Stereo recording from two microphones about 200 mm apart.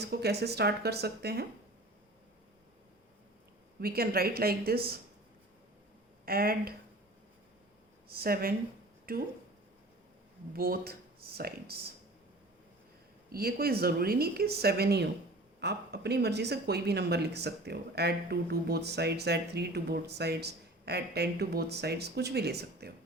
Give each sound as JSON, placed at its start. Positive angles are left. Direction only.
{"t": 0.0, "sound": "speech", "side_deg": -55}
{"t": 3.8, "sound": "speech", "side_deg": -50}
{"t": 6.2, "sound": "speech", "side_deg": -50}
{"t": 8.0, "sound": "speech", "side_deg": -50}
{"t": 10.5, "sound": "speech", "side_deg": -50}
{"t": 13.3, "sound": "speech", "side_deg": -50}